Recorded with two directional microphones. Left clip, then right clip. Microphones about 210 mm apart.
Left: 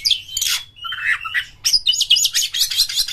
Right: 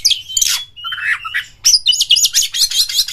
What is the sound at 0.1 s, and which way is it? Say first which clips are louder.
Bird: right 4 dB; 25° right (ahead or behind).